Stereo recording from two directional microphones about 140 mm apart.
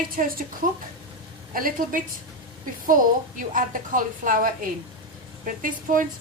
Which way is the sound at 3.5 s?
75° right (ahead or behind).